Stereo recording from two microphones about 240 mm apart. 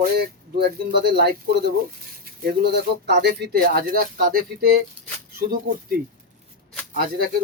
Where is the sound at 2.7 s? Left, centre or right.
Right.